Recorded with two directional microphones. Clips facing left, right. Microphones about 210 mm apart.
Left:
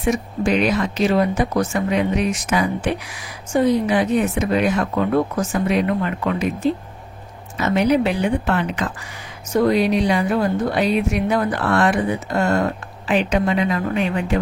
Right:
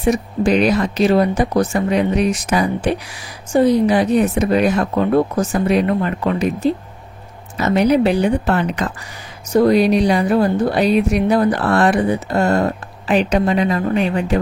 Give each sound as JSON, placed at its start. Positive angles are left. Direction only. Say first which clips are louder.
{"t": 0.0, "sound": "speech", "louder": "right 4 dB", "side_deg": -35}